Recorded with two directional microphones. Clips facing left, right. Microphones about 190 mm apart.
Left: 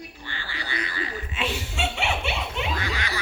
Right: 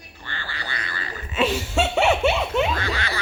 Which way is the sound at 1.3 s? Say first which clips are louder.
Right 10 dB; 45° right (ahead or behind).